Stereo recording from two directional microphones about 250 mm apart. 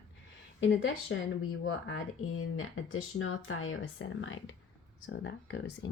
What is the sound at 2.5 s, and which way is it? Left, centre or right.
Speech, left.